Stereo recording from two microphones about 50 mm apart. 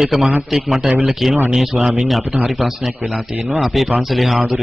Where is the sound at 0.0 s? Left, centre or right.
Centre.